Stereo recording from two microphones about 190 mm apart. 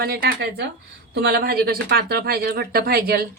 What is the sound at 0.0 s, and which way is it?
A woman's voice, 55° right (ahead or behind).